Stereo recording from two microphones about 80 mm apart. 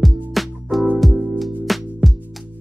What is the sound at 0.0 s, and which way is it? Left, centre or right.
Music, centre.